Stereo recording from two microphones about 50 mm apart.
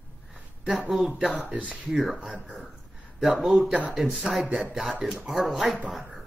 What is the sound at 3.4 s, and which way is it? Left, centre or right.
Speech, centre.